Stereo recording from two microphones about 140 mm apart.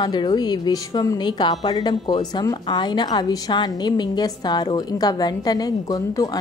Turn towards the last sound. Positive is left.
turn(degrees=25)  # may be behind; listen again after turning